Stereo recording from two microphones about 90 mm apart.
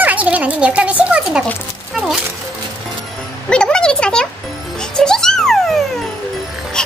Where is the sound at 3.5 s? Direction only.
10° left (ahead or behind).